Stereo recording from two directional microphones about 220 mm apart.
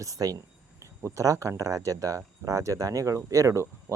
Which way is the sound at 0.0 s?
15° right (ahead or behind).